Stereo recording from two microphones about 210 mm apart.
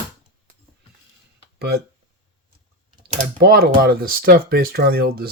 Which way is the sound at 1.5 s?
50° right (ahead or behind).